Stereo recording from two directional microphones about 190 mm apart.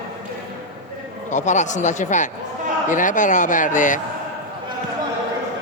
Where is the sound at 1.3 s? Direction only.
40° left (ahead or behind).